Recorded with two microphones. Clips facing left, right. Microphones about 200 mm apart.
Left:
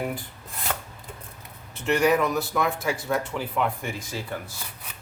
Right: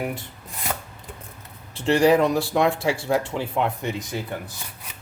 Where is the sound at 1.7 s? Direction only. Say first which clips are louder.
Right 4 dB; 30° right (ahead or behind).